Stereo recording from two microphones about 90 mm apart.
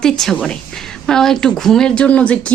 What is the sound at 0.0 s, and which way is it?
A woman's voice, 5° left (ahead or behind).